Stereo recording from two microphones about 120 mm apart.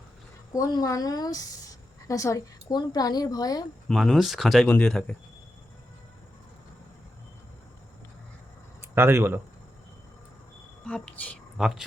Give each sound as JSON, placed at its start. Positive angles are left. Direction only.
{"t": 0.5, "sound": "a woman's voice", "side_deg": 30}
{"t": 3.8, "sound": "speech", "side_deg": 0}
{"t": 8.8, "sound": "speech", "side_deg": -20}
{"t": 10.8, "sound": "a woman's voice", "side_deg": 10}
{"t": 11.5, "sound": "speech", "side_deg": -5}